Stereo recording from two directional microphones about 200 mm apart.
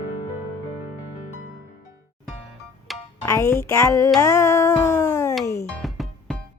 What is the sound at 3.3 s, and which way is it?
Speech, 15° left (ahead or behind).